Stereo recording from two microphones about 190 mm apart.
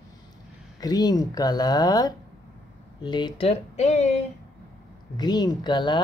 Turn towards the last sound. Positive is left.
turn(degrees=25)  # may be behind; listen again after turning